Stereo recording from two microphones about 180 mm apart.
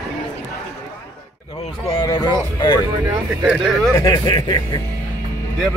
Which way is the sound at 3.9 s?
25° left (ahead or behind).